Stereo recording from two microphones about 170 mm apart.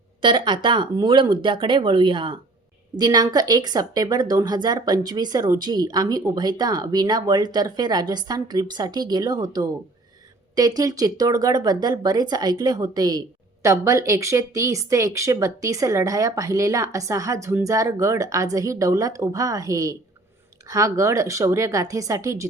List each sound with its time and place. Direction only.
0.2 s speech: 30° right (ahead or behind)